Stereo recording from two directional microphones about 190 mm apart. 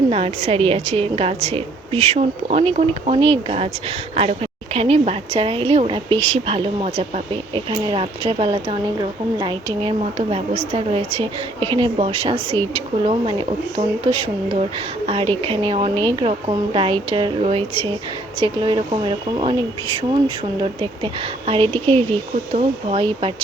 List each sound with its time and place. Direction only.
0.1 s a woman's voice: 30° right (ahead or behind)